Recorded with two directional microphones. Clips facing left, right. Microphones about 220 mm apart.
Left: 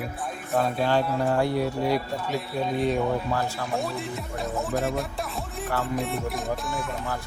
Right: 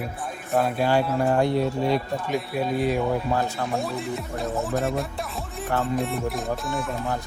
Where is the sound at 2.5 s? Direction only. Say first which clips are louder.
Right 1 dB; 5° right (ahead or behind).